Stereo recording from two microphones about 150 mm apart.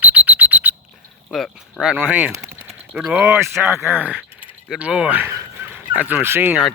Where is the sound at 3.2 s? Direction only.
15° right (ahead or behind).